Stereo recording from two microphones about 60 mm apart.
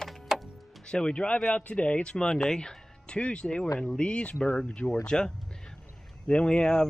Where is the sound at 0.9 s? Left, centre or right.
Centre.